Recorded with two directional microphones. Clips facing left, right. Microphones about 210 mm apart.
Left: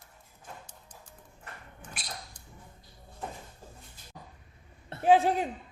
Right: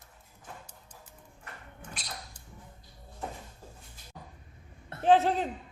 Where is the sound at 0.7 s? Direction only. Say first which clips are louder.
Even; 5° right (ahead or behind).